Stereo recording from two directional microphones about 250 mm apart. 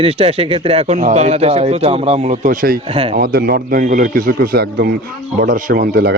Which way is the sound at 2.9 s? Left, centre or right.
Right.